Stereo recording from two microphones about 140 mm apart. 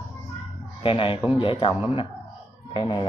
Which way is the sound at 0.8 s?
40° left (ahead or behind).